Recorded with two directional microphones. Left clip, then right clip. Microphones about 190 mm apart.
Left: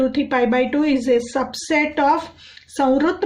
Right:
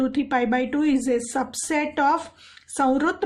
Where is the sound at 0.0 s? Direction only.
45° right (ahead or behind).